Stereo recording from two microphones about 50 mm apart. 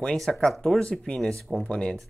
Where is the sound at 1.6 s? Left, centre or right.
Centre.